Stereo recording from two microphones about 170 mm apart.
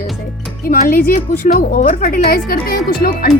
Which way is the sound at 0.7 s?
60° left (ahead or behind).